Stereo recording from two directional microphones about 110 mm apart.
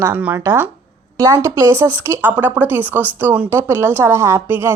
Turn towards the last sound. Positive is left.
turn(degrees=-25)  # may be behind; listen again after turning